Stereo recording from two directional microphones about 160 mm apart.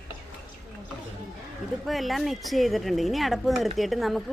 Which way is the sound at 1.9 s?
Centre (ahead or behind).